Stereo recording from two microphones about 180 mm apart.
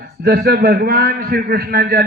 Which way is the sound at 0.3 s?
60° right (ahead or behind).